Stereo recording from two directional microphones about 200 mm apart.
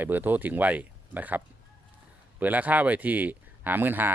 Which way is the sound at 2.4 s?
10° right (ahead or behind).